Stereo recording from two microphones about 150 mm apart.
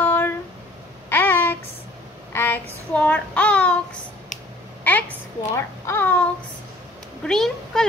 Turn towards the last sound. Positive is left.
turn(degrees=5)  # may be behind; listen again after turning